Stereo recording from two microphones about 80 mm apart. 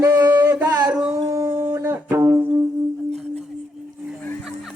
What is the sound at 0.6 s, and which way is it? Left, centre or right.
Singing, right.